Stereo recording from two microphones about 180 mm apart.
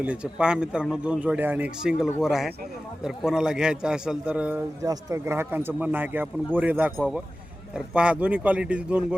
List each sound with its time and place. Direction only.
0.0 s a man's voice: 5° right (ahead or behind)
7.9 s a man's voice: 5° right (ahead or behind)